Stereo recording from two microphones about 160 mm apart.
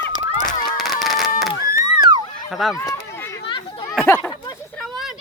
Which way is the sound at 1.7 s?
30° right (ahead or behind).